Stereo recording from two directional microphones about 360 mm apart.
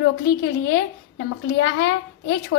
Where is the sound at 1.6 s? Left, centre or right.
Left.